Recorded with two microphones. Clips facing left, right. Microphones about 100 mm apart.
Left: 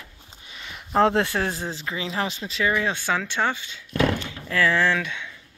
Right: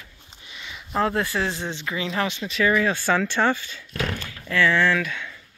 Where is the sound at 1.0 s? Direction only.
70° left (ahead or behind).